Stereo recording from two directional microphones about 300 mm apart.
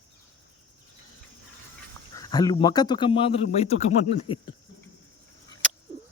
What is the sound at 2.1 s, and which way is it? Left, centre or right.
Speech, centre.